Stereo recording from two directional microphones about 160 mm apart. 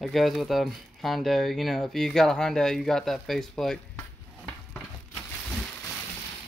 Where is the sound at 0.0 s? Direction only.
Centre (ahead or behind).